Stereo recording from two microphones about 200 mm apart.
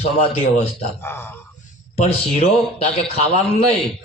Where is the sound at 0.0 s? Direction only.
30° left (ahead or behind).